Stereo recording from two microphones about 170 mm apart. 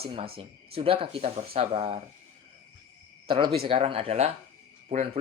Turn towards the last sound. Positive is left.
turn(degrees=-45)  # may be behind; listen again after turning